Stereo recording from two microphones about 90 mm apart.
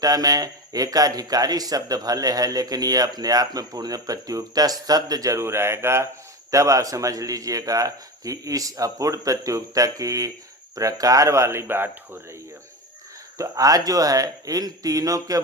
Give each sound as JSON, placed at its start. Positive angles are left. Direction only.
{"t": 0.0, "sound": "speech", "side_deg": -45}
{"t": 13.4, "sound": "speech", "side_deg": -40}